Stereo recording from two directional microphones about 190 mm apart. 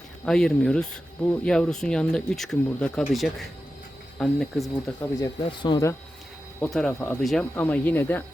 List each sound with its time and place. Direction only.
0.3 s speech: 5° left (ahead or behind)
5.2 s speech: 25° left (ahead or behind)
6.6 s speech: centre (ahead or behind)